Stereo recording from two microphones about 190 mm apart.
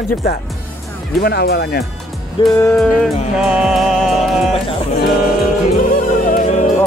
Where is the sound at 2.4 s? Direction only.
25° left (ahead or behind).